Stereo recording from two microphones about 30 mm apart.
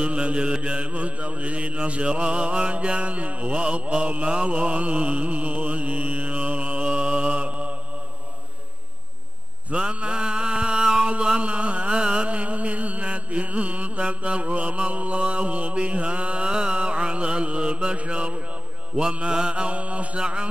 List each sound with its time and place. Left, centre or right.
0.0 s mantra: right
9.9 s mantra: right
11.3 s a sound: right
11.9 s music: right
12.3 s mantra: right
14.0 s mantra: right
15.1 s mantra: right
16.4 s mantra: right
19.2 s mantra: right
20.2 s mantra: right